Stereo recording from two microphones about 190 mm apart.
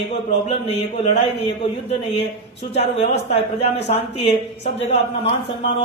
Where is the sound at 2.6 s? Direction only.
35° left (ahead or behind).